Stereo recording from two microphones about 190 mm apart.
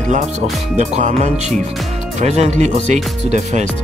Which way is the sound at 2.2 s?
35° right (ahead or behind).